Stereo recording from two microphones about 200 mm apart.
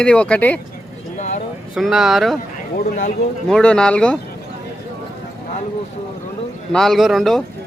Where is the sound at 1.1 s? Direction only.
40° left (ahead or behind).